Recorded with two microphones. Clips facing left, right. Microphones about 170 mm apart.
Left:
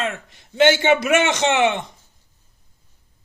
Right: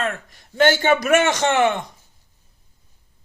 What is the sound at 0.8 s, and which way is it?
Speech, 40° right (ahead or behind).